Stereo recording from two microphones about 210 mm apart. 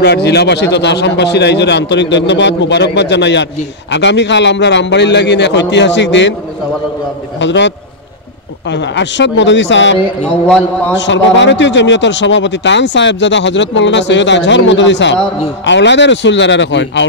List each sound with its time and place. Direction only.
0.0 s a man's voice: 50° left (ahead or behind)
7.3 s a man's voice: 55° left (ahead or behind)
11.0 s a man's voice: 60° left (ahead or behind)